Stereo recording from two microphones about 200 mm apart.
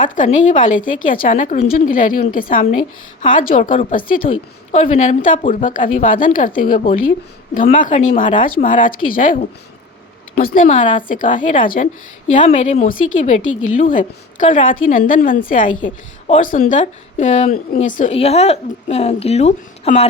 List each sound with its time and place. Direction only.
0.0 s a woman's voice: 40° left (ahead or behind)
13.4 s a woman's voice: 90° left
13.8 s a woman's voice: 40° left (ahead or behind)